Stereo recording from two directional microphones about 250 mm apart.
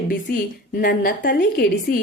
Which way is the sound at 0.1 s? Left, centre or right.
Left.